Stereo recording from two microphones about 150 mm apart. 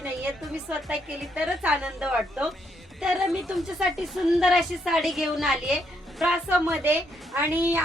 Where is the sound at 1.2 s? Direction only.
5° right (ahead or behind).